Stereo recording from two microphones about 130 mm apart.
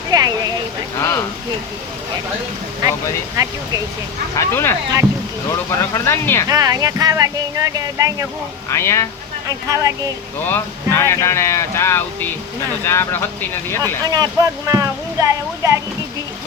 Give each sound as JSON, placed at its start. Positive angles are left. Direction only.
{"t": 0.1, "sound": "speech", "side_deg": -30}
{"t": 2.8, "sound": "speech", "side_deg": -30}
{"t": 4.4, "sound": "speech", "side_deg": 20}
{"t": 6.5, "sound": "speech", "side_deg": -30}
{"t": 8.7, "sound": "speech", "side_deg": 20}
{"t": 9.6, "sound": "speech", "side_deg": -25}
{"t": 10.4, "sound": "speech", "side_deg": 20}
{"t": 14.0, "sound": "speech", "side_deg": -30}